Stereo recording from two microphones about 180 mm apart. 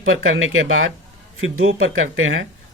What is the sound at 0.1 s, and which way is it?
Speech, 90° right.